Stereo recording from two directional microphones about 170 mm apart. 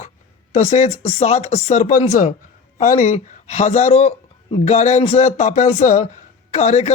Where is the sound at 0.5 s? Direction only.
40° left (ahead or behind).